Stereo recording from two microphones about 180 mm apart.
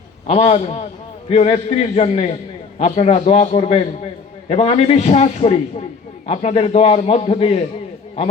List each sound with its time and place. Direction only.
0.3 s a man's voice: 35° left (ahead or behind)